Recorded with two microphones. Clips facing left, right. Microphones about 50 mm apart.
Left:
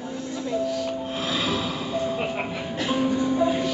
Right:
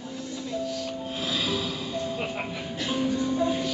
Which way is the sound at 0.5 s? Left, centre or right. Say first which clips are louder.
Left 5 dB; centre.